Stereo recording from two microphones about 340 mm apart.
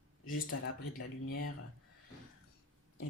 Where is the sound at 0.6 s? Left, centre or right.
Left.